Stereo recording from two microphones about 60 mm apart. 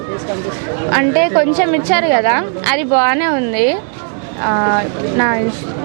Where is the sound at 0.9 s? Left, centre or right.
Right.